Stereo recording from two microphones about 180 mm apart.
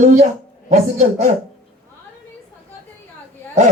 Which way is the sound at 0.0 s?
45° right (ahead or behind).